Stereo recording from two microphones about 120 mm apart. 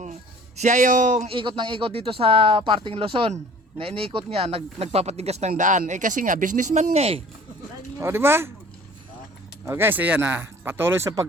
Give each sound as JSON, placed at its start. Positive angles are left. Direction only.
{"t": 0.0, "sound": "a sound", "side_deg": -80}
{"t": 1.3, "sound": "speech", "side_deg": -45}
{"t": 7.9, "sound": "speech", "side_deg": -20}
{"t": 9.6, "sound": "speech", "side_deg": -20}